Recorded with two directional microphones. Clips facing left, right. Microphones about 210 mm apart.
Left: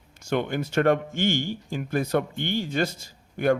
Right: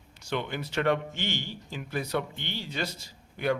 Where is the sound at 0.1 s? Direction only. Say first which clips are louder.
Left 6 dB; 50° left (ahead or behind).